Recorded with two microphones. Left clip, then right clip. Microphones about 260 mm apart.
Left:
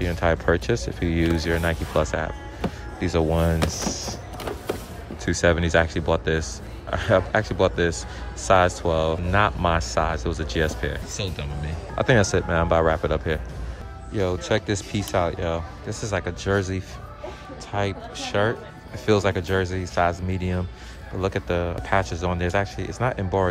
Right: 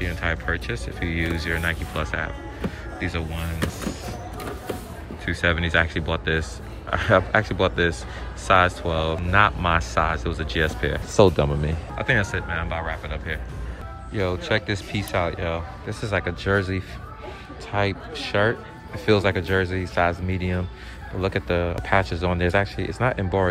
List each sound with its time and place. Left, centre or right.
0.0 s speech: centre
5.2 s speech: centre
11.1 s speech: centre
12.0 s speech: centre